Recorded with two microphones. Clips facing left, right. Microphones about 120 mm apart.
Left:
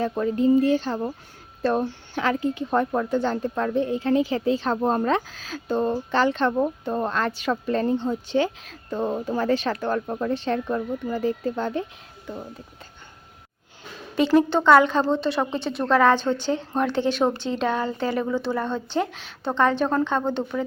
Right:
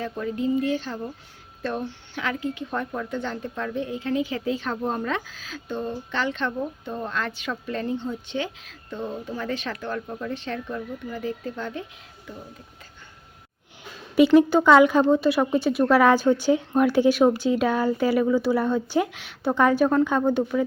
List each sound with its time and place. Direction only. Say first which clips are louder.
0.0 s speech: left 5 dB; 35° left (ahead or behind)
14.2 s speech: right 3 dB; 5° right (ahead or behind)